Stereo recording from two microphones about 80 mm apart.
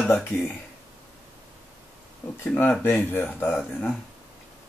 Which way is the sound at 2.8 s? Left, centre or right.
Left.